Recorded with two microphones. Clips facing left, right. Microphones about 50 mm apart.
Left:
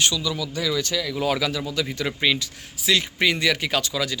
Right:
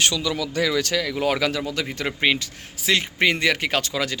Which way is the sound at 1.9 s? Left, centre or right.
Right.